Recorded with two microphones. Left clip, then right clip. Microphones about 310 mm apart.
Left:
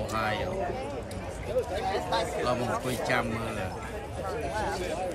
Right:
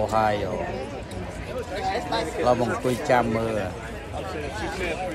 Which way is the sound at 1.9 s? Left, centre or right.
Centre.